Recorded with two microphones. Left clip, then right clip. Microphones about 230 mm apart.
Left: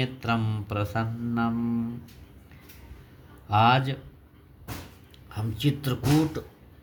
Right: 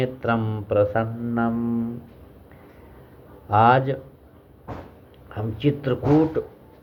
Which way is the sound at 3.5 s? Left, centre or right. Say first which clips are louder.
Right 5 dB; left.